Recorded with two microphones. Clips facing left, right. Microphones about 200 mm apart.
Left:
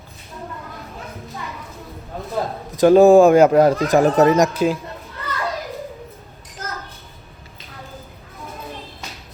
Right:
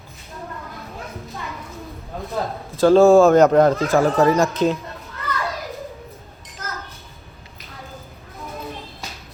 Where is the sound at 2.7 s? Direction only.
15° left (ahead or behind).